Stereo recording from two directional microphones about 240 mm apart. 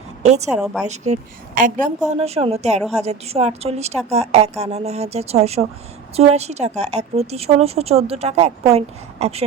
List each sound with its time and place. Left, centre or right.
0.2 s a woman's voice: right
0.5 s a woman's voice: centre
0.9 s a woman's voice: right